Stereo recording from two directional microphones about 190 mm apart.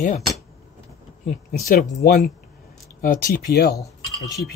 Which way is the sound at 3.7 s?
15° left (ahead or behind).